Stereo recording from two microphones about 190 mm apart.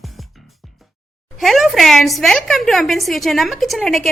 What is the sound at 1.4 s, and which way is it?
A woman's voice, centre (ahead or behind).